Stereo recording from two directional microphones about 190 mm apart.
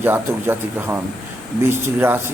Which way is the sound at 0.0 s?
10° right (ahead or behind).